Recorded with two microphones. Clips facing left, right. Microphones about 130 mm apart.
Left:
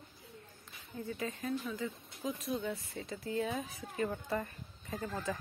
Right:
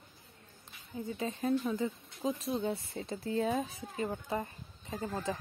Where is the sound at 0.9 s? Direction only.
20° right (ahead or behind).